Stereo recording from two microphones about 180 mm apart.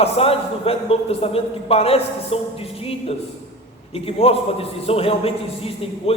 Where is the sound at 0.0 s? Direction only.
35° left (ahead or behind).